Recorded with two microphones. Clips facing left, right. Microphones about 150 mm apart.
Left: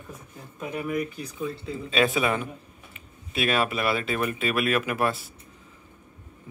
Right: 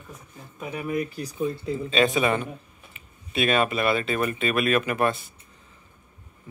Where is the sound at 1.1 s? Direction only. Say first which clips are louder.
Right 4 dB; 35° right (ahead or behind).